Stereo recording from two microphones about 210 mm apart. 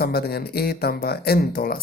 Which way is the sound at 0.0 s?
50° left (ahead or behind).